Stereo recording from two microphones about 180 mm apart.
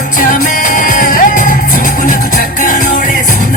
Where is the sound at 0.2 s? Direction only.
45° left (ahead or behind).